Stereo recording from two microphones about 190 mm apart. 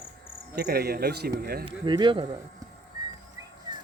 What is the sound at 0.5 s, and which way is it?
A man's voice, 55° right (ahead or behind).